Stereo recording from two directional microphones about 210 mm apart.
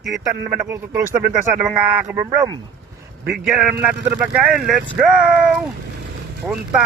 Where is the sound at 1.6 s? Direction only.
10° right (ahead or behind).